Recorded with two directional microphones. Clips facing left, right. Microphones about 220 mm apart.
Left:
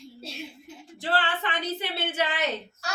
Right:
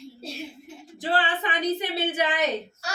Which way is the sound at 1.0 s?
15° right (ahead or behind).